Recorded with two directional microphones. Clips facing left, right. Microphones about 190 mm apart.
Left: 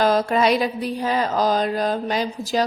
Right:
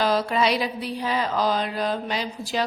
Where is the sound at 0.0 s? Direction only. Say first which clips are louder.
Left 4 dB; 45° left (ahead or behind).